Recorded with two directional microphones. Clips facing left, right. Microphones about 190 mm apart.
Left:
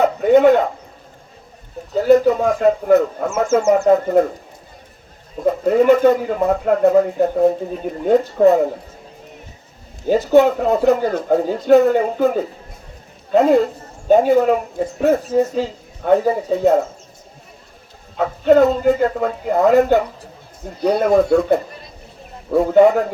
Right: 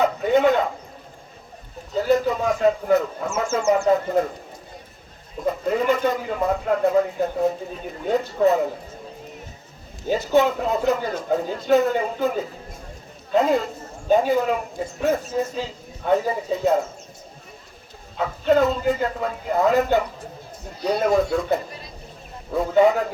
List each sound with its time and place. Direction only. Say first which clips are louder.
0.0 s a sound: left 6 dB; 50° left (ahead or behind)
2.0 s speech: left 7 dB; 45° left (ahead or behind)
5.6 s speech: left 9 dB; 45° left (ahead or behind)
10.1 s speech: left 6 dB; 45° left (ahead or behind)
18.2 s speech: left 6 dB; 50° left (ahead or behind)